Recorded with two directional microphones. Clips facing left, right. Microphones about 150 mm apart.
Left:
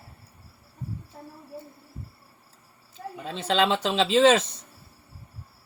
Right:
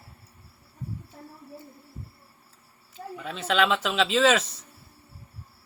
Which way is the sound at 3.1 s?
30° left (ahead or behind).